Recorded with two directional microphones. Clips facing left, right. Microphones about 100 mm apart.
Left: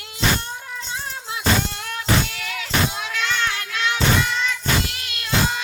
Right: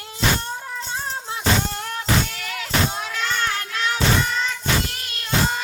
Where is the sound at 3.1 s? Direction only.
40° right (ahead or behind).